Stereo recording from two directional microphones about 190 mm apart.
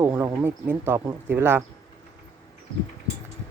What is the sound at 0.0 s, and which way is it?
Speech, 10° right (ahead or behind).